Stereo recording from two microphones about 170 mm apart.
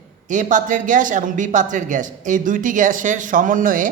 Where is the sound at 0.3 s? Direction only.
50° right (ahead or behind).